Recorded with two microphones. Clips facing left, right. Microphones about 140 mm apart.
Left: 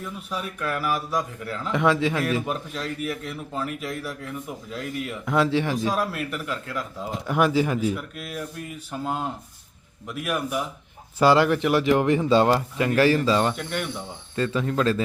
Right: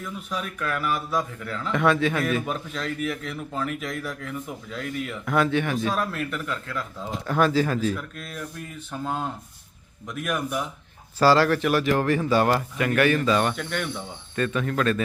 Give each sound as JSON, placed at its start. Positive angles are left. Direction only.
{"t": 0.0, "sound": "a man's voice", "side_deg": 5}
{"t": 2.4, "sound": "a man's voice", "side_deg": 10}
{"t": 5.3, "sound": "speech", "side_deg": 25}
{"t": 5.9, "sound": "a man's voice", "side_deg": 10}
{"t": 11.2, "sound": "speech", "side_deg": 15}
{"t": 13.5, "sound": "a man's voice", "side_deg": 5}
{"t": 14.3, "sound": "speech", "side_deg": 25}